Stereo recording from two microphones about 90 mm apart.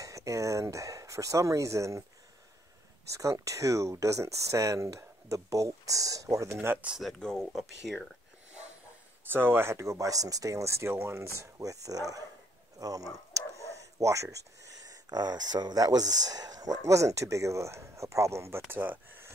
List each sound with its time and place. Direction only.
0.0 s speech: 35° right (ahead or behind)
3.1 s speech: 40° right (ahead or behind)
6.5 s speech: 25° right (ahead or behind)
7.0 s speech: 5° left (ahead or behind)
9.2 s speech: 25° right (ahead or behind)